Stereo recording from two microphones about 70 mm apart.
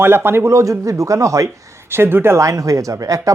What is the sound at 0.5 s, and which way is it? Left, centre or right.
Speech, right.